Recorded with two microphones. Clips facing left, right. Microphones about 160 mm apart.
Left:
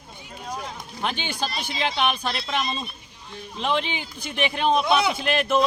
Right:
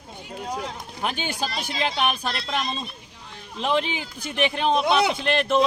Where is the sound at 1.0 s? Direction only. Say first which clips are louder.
Even; 5° right (ahead or behind).